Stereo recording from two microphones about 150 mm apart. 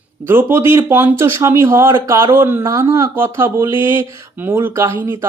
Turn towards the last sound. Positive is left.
turn(degrees=-15)  # may be behind; listen again after turning